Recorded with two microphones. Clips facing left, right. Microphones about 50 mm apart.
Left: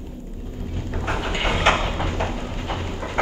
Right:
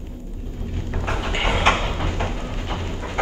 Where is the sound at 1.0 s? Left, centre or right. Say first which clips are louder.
Left 1 dB; centre.